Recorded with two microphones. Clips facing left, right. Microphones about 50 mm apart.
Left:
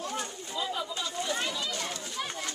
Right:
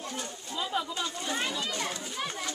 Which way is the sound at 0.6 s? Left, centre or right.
Centre.